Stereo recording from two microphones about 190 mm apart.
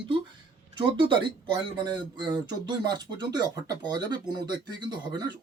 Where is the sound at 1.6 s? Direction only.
25° right (ahead or behind).